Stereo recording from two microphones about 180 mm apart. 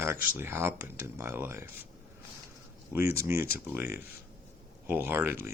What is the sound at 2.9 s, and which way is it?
Speech, 15° right (ahead or behind).